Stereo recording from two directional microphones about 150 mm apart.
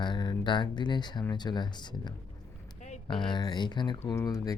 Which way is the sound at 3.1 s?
30° left (ahead or behind).